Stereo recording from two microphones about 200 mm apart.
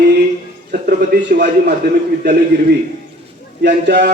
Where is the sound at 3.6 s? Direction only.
60° right (ahead or behind).